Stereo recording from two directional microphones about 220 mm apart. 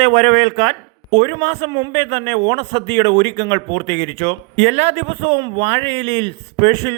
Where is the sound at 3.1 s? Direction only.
55° right (ahead or behind).